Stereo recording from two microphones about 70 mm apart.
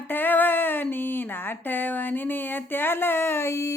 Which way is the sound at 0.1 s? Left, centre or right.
Left.